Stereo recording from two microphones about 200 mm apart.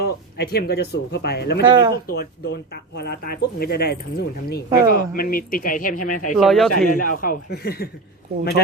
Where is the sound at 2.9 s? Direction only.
50° left (ahead or behind).